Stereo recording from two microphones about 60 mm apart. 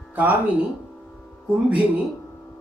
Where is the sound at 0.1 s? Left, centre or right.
Right.